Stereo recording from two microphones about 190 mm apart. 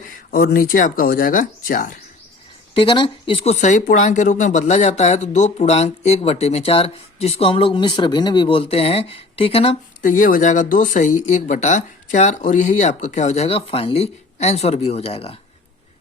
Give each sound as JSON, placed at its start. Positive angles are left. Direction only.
{"t": 0.3, "sound": "speech", "side_deg": 55}
{"t": 2.7, "sound": "speech", "side_deg": 25}
{"t": 10.0, "sound": "speech", "side_deg": 45}